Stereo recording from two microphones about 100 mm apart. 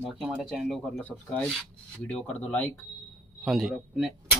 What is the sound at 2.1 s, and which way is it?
Speech, 15° left (ahead or behind).